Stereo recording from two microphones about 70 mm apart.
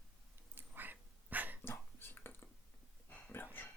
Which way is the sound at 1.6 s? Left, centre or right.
Left.